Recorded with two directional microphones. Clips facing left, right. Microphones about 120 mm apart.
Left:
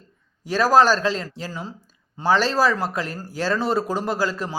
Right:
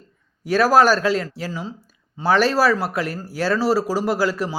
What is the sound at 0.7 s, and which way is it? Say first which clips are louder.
Speech: even; 10° right (ahead or behind).